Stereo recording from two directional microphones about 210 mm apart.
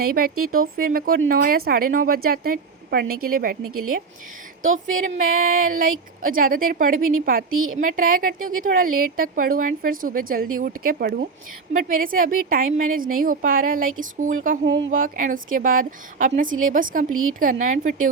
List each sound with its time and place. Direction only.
0.0 s a woman's voice: 45° right (ahead or behind)
0.3 s speech: 90° right
0.8 s a woman's voice: 45° right (ahead or behind)
5.1 s a woman's voice: 40° right (ahead or behind)
7.5 s a woman's voice: 80° right
7.8 s a woman's voice: 40° right (ahead or behind)
17.1 s a woman's voice: 80° right
17.4 s a woman's voice: 40° right (ahead or behind)